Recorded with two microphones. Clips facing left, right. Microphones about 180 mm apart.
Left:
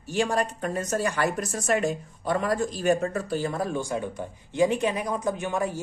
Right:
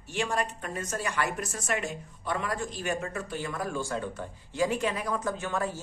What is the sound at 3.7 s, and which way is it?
Speech, 15° left (ahead or behind).